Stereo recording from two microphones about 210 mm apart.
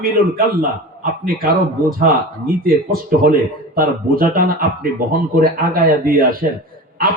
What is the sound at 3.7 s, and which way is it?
Speech, 45° right (ahead or behind).